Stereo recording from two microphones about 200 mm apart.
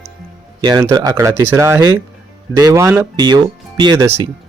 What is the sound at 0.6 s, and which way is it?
Speech, 20° right (ahead or behind).